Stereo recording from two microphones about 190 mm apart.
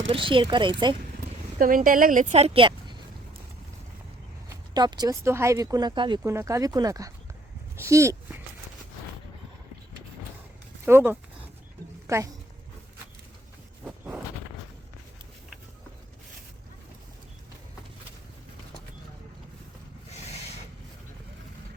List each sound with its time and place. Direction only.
0.1 s speech: 25° right (ahead or behind)
1.5 s a woman's voice: 45° right (ahead or behind); by 2.9 s 25° right (ahead or behind)
4.4 s speech: 20° right (ahead or behind)
10.8 s a woman's voice: 10° right (ahead or behind)
13.8 s walk: 10° right (ahead or behind)